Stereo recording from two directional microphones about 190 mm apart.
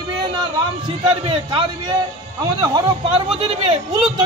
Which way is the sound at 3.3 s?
30° right (ahead or behind).